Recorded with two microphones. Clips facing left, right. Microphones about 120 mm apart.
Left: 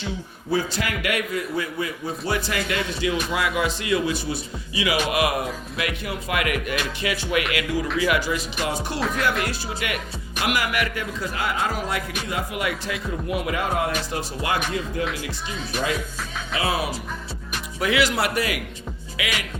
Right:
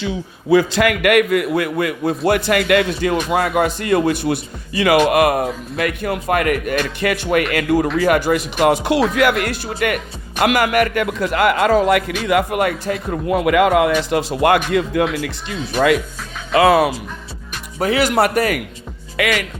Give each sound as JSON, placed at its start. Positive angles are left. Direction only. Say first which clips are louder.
{"t": 0.5, "sound": "a man's voice", "louder": "right 11 dB", "side_deg": -75}
{"t": 9.4, "sound": "speech", "louder": "right 7 dB", "side_deg": -55}
{"t": 10.9, "sound": "a man's voice", "louder": "right 10 dB", "side_deg": -70}
{"t": 13.2, "sound": "a man's voice", "louder": "right 12 dB", "side_deg": -80}
{"t": 16.6, "sound": "speech", "louder": "right 13 dB", "side_deg": -90}
{"t": 17.7, "sound": "a man's voice", "louder": "right 6 dB", "side_deg": -40}